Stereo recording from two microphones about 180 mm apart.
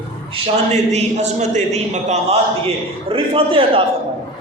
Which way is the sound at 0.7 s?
40° right (ahead or behind).